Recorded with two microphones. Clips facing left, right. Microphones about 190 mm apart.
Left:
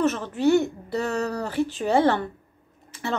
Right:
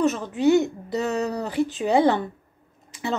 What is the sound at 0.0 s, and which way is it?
Speech, 15° right (ahead or behind).